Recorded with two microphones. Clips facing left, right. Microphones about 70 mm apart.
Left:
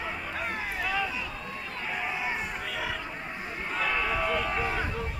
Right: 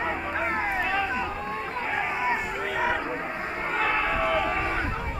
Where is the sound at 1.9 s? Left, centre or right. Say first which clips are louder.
Right 5 dB; right.